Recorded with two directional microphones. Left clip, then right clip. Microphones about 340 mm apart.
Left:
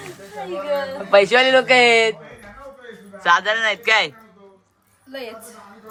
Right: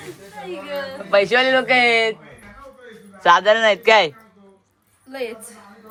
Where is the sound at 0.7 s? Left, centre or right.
Centre.